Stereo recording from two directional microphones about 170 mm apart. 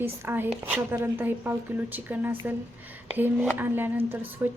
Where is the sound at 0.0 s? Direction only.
15° right (ahead or behind).